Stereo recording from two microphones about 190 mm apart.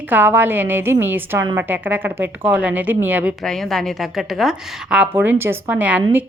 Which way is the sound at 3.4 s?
Centre (ahead or behind).